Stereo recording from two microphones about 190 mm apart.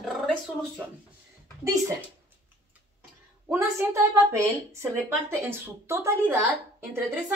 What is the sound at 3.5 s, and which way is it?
A woman's voice, 15° right (ahead or behind).